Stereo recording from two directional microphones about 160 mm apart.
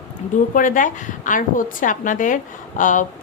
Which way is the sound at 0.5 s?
55° left (ahead or behind).